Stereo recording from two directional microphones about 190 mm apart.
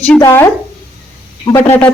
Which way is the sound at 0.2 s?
15° left (ahead or behind).